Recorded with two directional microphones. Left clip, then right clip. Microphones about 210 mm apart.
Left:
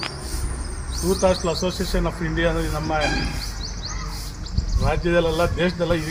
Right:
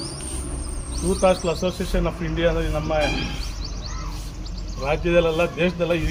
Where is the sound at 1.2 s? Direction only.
20° left (ahead or behind).